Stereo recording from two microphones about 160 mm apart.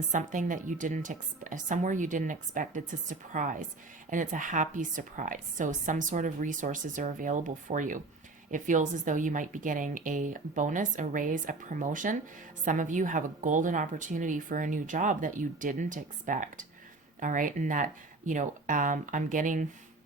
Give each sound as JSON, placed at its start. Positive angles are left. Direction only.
{"t": 0.1, "sound": "a woman's voice", "side_deg": -55}